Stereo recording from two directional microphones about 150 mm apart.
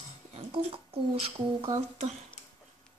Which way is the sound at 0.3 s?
40° right (ahead or behind).